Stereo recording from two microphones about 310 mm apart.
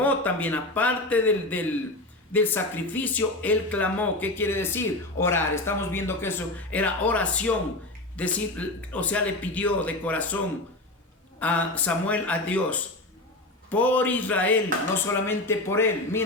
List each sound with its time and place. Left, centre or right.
0.0 s speech: centre
11.3 s a man's voice: centre